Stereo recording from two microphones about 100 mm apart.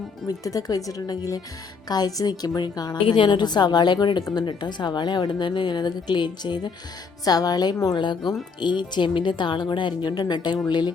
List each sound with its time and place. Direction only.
0.3 s speech: 35° left (ahead or behind)
3.1 s a woman's voice: 50° left (ahead or behind)
7.9 s a woman's voice: 50° left (ahead or behind)